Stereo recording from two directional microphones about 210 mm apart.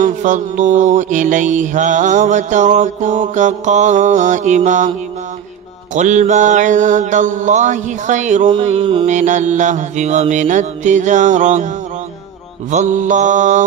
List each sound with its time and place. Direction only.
0.0 s mantra: 35° right (ahead or behind)
5.9 s mantra: 35° right (ahead or behind)
12.7 s mantra: 35° right (ahead or behind)